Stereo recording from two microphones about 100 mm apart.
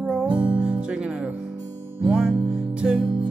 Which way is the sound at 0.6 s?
10° right (ahead or behind).